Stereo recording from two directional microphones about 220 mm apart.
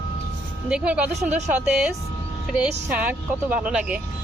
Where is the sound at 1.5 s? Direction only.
5° right (ahead or behind).